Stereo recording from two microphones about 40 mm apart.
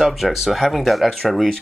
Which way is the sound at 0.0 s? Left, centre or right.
Centre.